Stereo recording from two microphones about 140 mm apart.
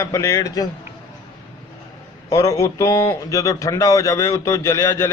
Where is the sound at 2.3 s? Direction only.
25° left (ahead or behind).